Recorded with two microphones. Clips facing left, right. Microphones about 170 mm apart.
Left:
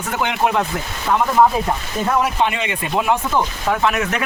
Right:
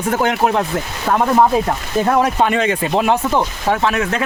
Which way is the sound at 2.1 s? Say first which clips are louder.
Right 3 dB; 45° right (ahead or behind).